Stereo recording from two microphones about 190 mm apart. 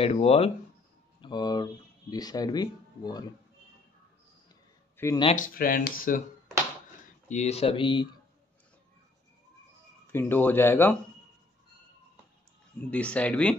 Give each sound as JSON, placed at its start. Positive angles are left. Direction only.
{"t": 0.0, "sound": "speech", "side_deg": 30}
{"t": 1.2, "sound": "speech", "side_deg": 20}
{"t": 4.9, "sound": "a sound", "side_deg": 15}
{"t": 5.3, "sound": "speech", "side_deg": 45}
{"t": 7.2, "sound": "speech", "side_deg": 35}
{"t": 10.1, "sound": "speech", "side_deg": 10}
{"t": 12.9, "sound": "speech", "side_deg": 5}